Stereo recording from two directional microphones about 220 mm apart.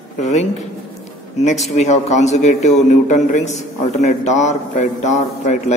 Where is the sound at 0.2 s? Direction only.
30° left (ahead or behind).